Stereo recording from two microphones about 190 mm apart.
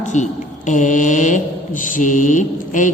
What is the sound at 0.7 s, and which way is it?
Mantra, 40° left (ahead or behind).